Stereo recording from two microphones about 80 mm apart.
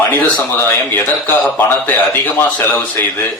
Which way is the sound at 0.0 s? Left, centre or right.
Left.